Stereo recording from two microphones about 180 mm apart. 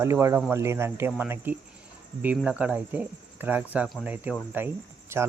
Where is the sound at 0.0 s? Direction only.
15° right (ahead or behind).